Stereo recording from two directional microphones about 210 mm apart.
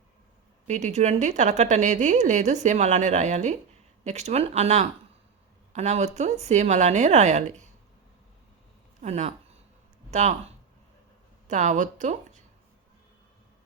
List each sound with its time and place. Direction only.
0.7 s a woman's voice: 35° right (ahead or behind)
9.0 s speech: 30° right (ahead or behind)
11.4 s speech: 35° right (ahead or behind)